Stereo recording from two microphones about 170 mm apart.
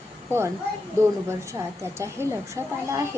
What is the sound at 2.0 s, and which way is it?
A woman's voice, 15° right (ahead or behind).